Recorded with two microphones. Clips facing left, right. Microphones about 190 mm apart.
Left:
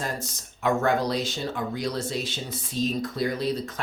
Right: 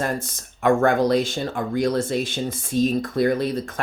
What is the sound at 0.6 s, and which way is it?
Speech, 55° right (ahead or behind).